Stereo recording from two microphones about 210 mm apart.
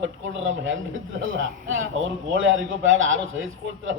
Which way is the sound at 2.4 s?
65° right (ahead or behind).